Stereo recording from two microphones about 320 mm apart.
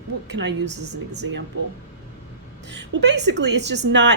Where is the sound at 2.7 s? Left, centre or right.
Right.